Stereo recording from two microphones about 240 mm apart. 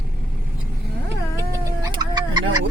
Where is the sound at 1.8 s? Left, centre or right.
Centre.